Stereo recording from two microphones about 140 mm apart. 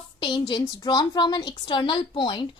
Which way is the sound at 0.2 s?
35° left (ahead or behind).